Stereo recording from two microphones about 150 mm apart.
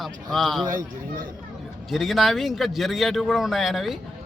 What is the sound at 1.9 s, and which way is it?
Speech, centre (ahead or behind).